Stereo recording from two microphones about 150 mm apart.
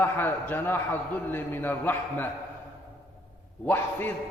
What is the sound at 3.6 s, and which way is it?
Speech, 10° left (ahead or behind).